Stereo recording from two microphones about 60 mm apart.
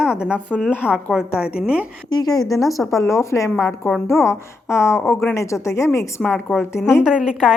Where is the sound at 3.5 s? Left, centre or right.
Left.